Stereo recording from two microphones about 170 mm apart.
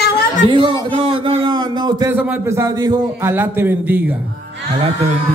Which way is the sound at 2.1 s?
10° right (ahead or behind).